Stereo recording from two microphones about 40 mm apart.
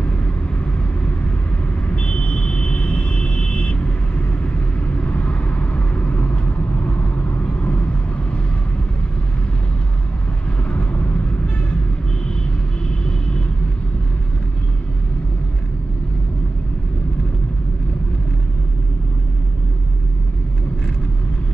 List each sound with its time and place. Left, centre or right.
1.9 s vehicle: left
10.7 s vehicle: left